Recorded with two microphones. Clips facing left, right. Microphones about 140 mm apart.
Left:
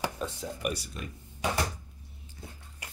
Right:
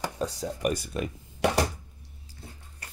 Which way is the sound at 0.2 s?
35° right (ahead or behind).